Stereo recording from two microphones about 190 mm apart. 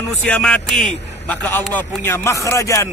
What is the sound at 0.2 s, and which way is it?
A man's voice, 5° left (ahead or behind).